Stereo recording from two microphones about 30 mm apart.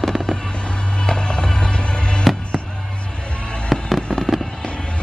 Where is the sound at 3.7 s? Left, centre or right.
Centre.